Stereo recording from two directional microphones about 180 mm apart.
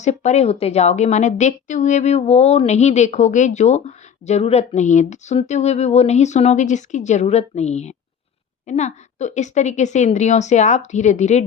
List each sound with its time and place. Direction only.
0.0 s a woman's voice: 40° left (ahead or behind)